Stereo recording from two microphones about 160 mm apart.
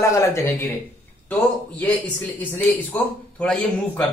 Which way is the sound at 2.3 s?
10° left (ahead or behind).